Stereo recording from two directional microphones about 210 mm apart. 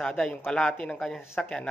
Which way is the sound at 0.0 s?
5° left (ahead or behind).